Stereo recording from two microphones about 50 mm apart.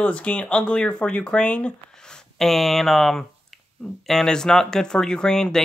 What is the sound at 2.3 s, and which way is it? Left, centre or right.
Speech, centre.